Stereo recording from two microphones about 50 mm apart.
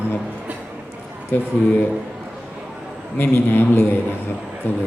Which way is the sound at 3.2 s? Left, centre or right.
Left.